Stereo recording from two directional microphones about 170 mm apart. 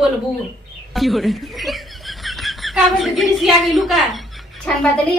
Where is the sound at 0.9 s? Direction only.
Centre (ahead or behind).